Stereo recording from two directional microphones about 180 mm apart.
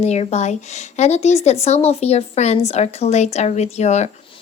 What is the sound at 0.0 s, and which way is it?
Speech, 35° left (ahead or behind).